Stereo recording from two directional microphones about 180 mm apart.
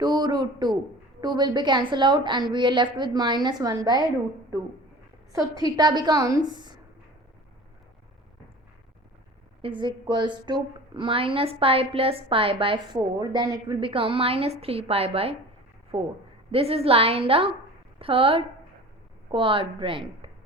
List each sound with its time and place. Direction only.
0.0 s a woman's voice: 20° right (ahead or behind)
5.3 s a woman's voice: 20° right (ahead or behind)
9.6 s a woman's voice: 30° right (ahead or behind)